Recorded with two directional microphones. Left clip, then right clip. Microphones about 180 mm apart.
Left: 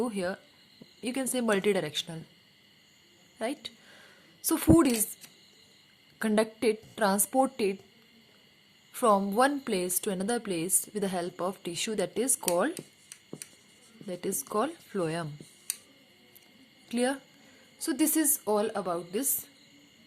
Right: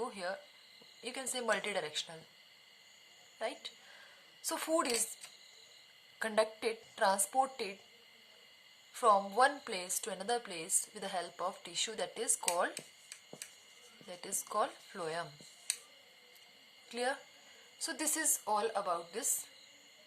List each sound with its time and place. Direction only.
0.0 s speech: 40° left (ahead or behind)
3.3 s speech: 40° left (ahead or behind)
6.1 s speech: 35° left (ahead or behind)
8.9 s speech: 35° left (ahead or behind)
14.1 s speech: 35° left (ahead or behind)
16.9 s speech: 40° left (ahead or behind)